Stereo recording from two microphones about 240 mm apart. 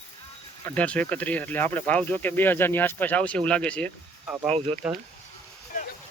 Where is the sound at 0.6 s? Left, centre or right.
Centre.